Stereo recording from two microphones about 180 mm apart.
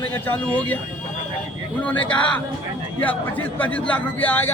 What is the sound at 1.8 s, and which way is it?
A man's voice, 10° left (ahead or behind).